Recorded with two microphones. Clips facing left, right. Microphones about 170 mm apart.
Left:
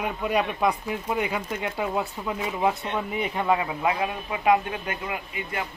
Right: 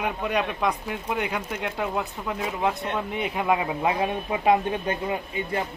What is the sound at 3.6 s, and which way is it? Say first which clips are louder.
Speech: right 1 dB; 25° right (ahead or behind).